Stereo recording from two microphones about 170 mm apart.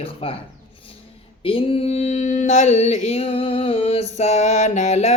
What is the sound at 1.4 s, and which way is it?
Speech, 30° left (ahead or behind).